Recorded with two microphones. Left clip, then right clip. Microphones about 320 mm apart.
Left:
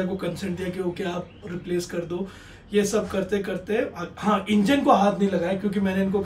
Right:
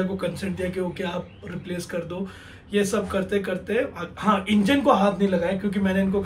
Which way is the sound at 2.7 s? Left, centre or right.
Centre.